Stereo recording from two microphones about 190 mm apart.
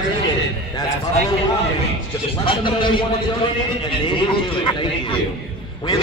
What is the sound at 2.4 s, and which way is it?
Speech, 25° left (ahead or behind).